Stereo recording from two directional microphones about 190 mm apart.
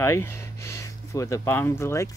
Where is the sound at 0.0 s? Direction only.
15° left (ahead or behind).